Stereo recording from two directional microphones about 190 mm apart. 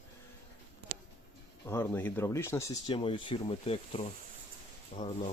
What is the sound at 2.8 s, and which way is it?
Speech, 30° left (ahead or behind).